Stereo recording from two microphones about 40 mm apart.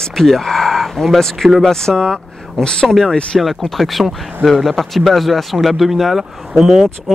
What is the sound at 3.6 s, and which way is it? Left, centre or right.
Speech, centre.